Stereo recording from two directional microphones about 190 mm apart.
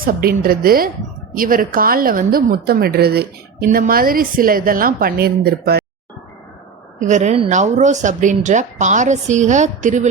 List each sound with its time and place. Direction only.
0.0 s a woman's voice: 50° right (ahead or behind)
7.0 s a woman's voice: 40° right (ahead or behind)